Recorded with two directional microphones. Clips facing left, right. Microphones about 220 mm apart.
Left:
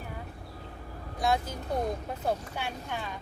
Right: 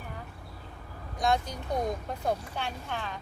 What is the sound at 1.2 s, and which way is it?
Speech, 5° left (ahead or behind).